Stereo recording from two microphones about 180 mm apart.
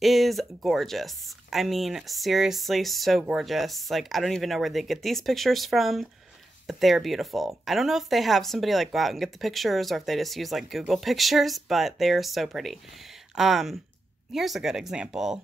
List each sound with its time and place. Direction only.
0.0 s speech: centre (ahead or behind)